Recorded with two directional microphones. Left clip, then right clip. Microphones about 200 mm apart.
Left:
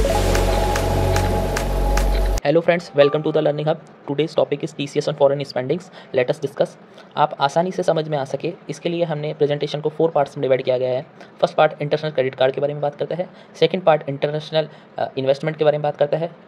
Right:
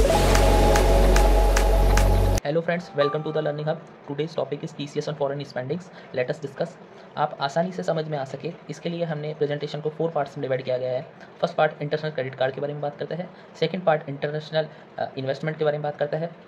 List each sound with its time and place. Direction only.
0.7 s music: centre (ahead or behind)
2.4 s speech: 35° left (ahead or behind)